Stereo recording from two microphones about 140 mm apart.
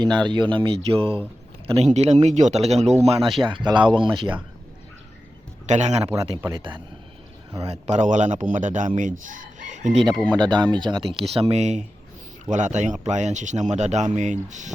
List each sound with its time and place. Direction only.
0.0 s speech: 30° right (ahead or behind)
1.8 s speech: 50° right (ahead or behind)
3.4 s speech: 35° right (ahead or behind)
5.6 s a man's voice: 55° right (ahead or behind)
6.1 s speech: 25° right (ahead or behind)
6.6 s speech: 35° right (ahead or behind)
7.6 s a man's voice: 50° right (ahead or behind)
10.3 s a man's voice: 35° right (ahead or behind); by 14.7 s 60° right (ahead or behind)